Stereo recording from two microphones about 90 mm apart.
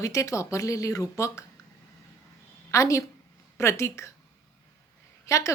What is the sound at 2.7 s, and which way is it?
A woman's voice, 35° left (ahead or behind).